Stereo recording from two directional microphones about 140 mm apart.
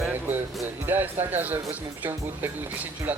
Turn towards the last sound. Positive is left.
turn(degrees=-10)  # may be behind; listen again after turning